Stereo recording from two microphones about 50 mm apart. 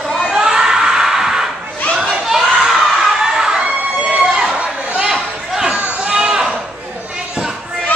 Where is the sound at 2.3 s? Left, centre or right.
Centre.